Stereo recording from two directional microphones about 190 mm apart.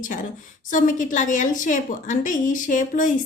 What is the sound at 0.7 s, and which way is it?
A woman's voice, 45° left (ahead or behind).